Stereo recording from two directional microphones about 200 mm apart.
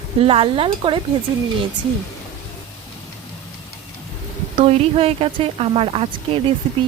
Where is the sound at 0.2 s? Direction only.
30° right (ahead or behind).